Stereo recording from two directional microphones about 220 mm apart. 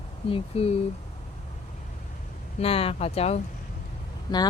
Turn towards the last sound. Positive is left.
turn(degrees=20)  # may be behind; listen again after turning